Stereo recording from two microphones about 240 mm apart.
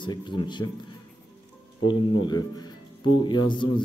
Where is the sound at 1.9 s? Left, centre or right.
Centre.